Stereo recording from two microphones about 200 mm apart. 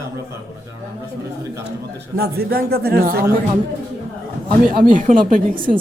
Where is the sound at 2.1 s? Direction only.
50° right (ahead or behind).